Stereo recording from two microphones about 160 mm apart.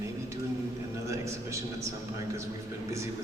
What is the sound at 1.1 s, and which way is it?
Speech, 20° right (ahead or behind).